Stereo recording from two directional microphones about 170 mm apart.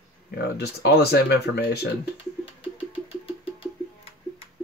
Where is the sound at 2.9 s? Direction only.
35° left (ahead or behind).